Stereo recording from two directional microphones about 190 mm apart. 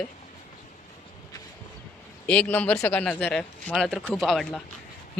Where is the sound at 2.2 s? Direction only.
10° left (ahead or behind).